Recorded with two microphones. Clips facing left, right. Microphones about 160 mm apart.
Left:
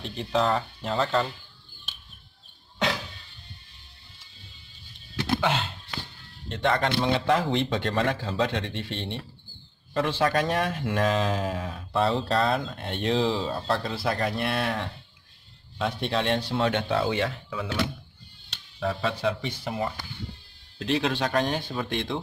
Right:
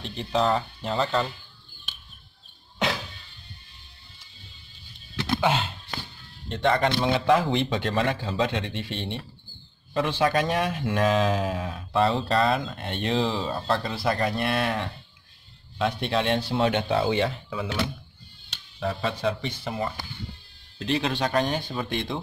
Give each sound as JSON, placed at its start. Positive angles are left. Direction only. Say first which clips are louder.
{"t": 0.0, "sound": "speech", "louder": "right 1 dB", "side_deg": 0}
{"t": 5.4, "sound": "speech", "louder": "right 2 dB", "side_deg": -10}
{"t": 16.5, "sound": "speech", "louder": "right 3 dB", "side_deg": -15}
{"t": 18.5, "sound": "speech", "louder": "even", "side_deg": 0}